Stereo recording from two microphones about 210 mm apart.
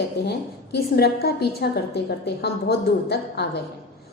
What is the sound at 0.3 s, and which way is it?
A woman's voice, 50° left (ahead or behind).